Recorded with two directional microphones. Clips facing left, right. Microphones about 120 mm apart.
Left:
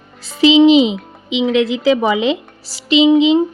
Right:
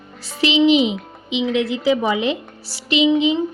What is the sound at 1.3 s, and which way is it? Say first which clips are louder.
A woman's voice: left 5 dB; 90° left.